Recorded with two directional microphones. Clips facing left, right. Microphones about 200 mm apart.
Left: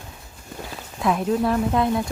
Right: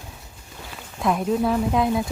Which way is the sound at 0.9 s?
Centre (ahead or behind).